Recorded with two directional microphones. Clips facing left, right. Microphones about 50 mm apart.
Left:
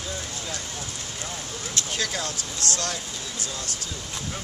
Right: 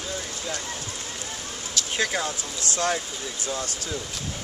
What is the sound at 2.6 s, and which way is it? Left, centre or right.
Speech, left.